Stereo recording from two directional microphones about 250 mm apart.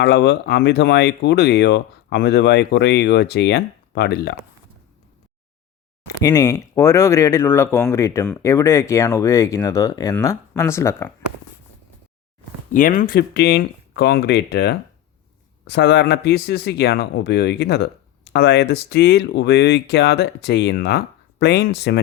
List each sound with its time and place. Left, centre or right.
0.0 s speech: left
6.2 s speech: centre
12.7 s speech: left